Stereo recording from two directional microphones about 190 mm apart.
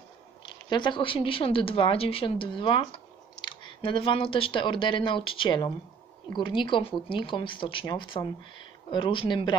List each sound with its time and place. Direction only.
0.4 s speech: 25° left (ahead or behind)